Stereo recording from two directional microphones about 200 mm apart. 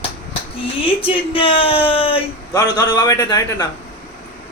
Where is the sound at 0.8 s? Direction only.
25° left (ahead or behind).